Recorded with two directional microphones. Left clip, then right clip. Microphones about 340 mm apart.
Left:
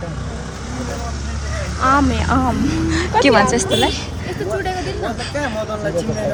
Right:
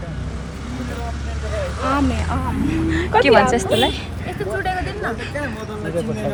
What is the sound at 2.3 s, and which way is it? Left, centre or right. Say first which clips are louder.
Speech: left 8 dB; left.